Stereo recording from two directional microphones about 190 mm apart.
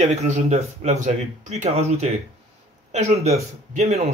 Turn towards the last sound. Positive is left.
turn(degrees=-35)  # may be behind; listen again after turning